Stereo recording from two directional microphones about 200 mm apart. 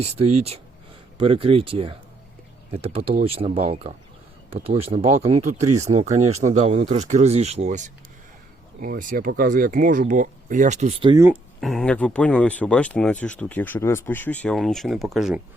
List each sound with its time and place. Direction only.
0.0 s speech: 30° right (ahead or behind)
11.6 s speech: centre (ahead or behind)